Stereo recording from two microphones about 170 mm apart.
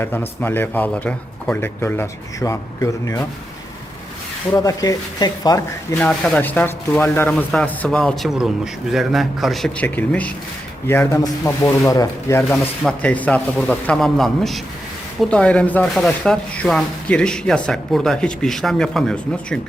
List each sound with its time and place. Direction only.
0.0 s speech: 10° left (ahead or behind)
4.5 s speech: 20° left (ahead or behind)
6.0 s speech: 10° left (ahead or behind)
12.5 s speech: 5° left (ahead or behind)